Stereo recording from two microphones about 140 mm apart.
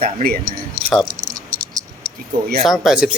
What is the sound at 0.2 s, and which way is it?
Speech, 90° right.